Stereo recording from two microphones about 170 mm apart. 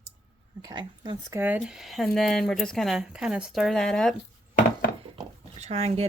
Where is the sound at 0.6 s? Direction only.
25° right (ahead or behind).